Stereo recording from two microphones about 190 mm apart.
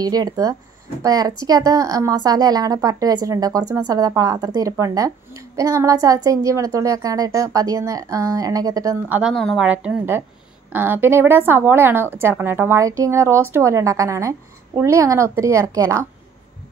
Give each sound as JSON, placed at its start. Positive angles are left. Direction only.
{"t": 0.0, "sound": "a woman's voice", "side_deg": -20}
{"t": 9.2, "sound": "a woman's voice", "side_deg": 0}